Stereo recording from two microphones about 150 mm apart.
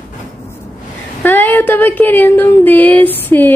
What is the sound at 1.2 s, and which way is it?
A woman's voice, 15° left (ahead or behind).